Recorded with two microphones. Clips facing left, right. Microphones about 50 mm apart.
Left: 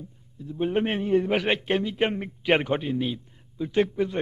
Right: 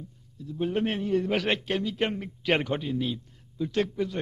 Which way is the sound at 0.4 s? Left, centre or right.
Left.